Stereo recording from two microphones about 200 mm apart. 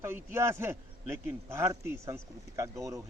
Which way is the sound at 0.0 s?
10° right (ahead or behind).